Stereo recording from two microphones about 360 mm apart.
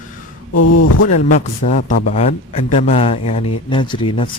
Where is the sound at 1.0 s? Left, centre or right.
Left.